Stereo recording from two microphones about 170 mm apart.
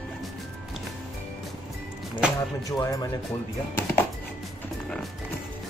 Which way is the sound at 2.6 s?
20° left (ahead or behind).